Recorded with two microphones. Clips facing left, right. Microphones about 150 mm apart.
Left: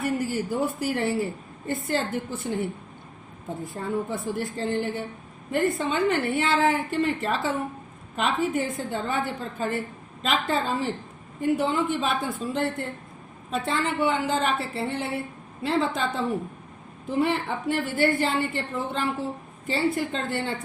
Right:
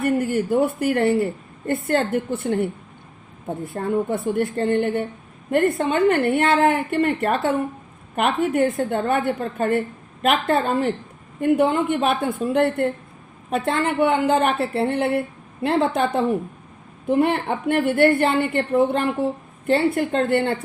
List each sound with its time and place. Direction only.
0.0 s a woman's voice: 60° right (ahead or behind)